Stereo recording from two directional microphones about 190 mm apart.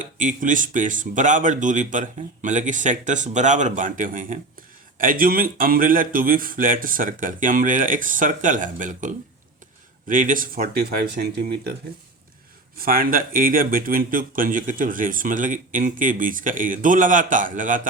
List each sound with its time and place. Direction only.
0.0 s speech: 40° right (ahead or behind)
12.8 s speech: 50° right (ahead or behind)